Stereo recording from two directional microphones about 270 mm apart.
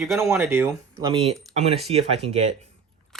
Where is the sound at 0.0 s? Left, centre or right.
Centre.